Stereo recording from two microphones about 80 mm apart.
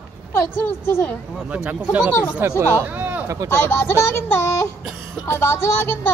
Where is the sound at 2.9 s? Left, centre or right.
Centre.